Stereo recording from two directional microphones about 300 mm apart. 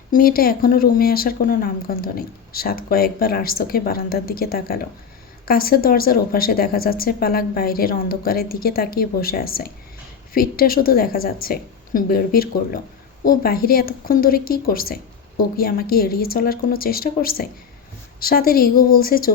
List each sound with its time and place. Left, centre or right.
0.1 s speech: left